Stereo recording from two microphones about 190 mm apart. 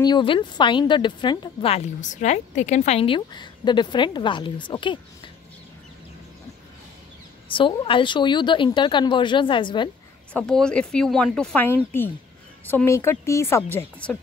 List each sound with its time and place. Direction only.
0.0 s speech: 25° left (ahead or behind)
7.4 s speech: 25° left (ahead or behind)
10.3 s a woman's voice: 5° left (ahead or behind)